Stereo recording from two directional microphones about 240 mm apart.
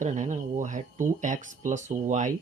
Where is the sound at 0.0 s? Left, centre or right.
Right.